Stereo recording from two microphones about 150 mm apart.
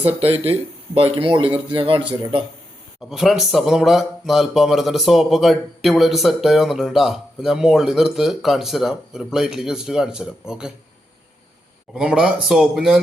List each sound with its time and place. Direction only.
0.0 s speech: 40° right (ahead or behind)
3.0 s speech: centre (ahead or behind)
11.9 s speech: 5° right (ahead or behind)